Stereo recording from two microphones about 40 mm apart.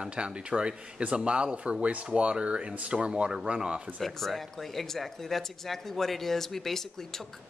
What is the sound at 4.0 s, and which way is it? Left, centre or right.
Speech, centre.